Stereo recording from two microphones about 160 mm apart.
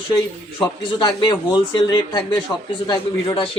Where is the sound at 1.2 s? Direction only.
25° left (ahead or behind).